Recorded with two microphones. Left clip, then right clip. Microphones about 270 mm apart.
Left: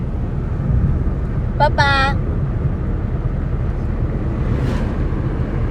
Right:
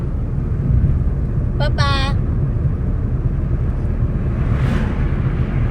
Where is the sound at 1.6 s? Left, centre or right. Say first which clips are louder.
Left 7 dB; left.